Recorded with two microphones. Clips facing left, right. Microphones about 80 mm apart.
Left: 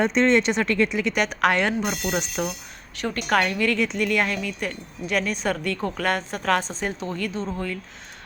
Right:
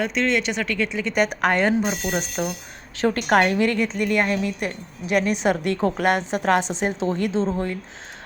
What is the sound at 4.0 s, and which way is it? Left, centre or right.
Speech, centre.